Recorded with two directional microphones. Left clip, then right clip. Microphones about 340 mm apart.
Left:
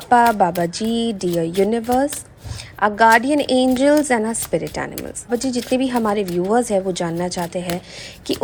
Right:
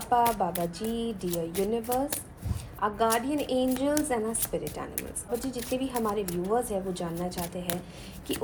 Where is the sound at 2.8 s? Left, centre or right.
Centre.